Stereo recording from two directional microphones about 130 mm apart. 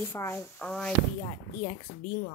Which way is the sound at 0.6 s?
5° left (ahead or behind).